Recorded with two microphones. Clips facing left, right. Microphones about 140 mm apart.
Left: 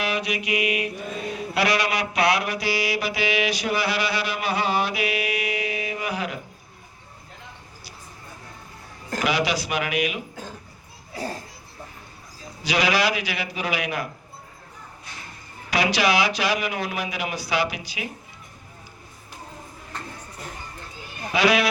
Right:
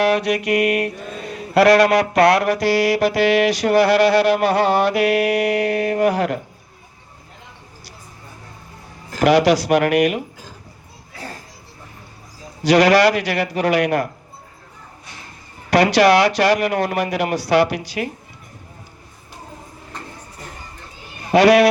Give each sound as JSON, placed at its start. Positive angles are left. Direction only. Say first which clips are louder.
{"t": 0.0, "sound": "music", "louder": "right 10 dB", "side_deg": -80}
{"t": 0.4, "sound": "a man's voice", "louder": "right 7 dB", "side_deg": -75}
{"t": 1.5, "sound": "music", "louder": "right 12 dB", "side_deg": -85}
{"t": 9.2, "sound": "a man's voice", "louder": "right 11 dB", "side_deg": -80}
{"t": 12.6, "sound": "a man's voice", "louder": "right 10 dB", "side_deg": -80}
{"t": 15.7, "sound": "music", "louder": "right 9 dB", "side_deg": -80}
{"t": 18.0, "sound": "speech", "louder": "right 9 dB", "side_deg": -55}
{"t": 21.3, "sound": "a man's voice", "louder": "right 9 dB", "side_deg": -75}